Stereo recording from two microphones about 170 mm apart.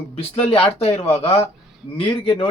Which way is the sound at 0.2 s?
35° left (ahead or behind).